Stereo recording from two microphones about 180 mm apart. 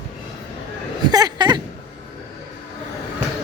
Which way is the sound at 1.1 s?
20° right (ahead or behind).